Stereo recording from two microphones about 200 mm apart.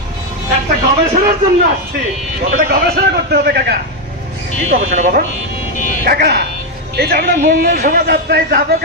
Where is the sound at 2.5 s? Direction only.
45° right (ahead or behind).